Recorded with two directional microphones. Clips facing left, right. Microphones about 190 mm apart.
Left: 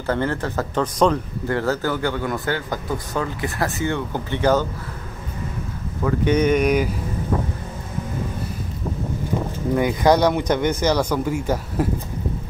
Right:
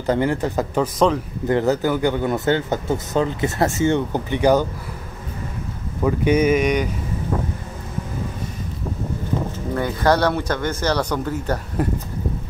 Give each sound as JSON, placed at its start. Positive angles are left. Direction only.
{"t": 0.0, "sound": "speech", "side_deg": -15}
{"t": 0.9, "sound": "speech", "side_deg": 0}
{"t": 1.5, "sound": "a man's voice", "side_deg": -20}
{"t": 6.0, "sound": "speech", "side_deg": -10}
{"t": 9.8, "sound": "speech", "side_deg": 15}